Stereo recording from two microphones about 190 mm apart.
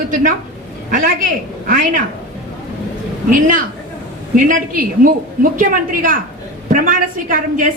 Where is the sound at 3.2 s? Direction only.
45° right (ahead or behind).